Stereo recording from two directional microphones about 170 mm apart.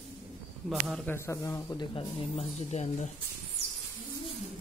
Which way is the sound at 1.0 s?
15° left (ahead or behind).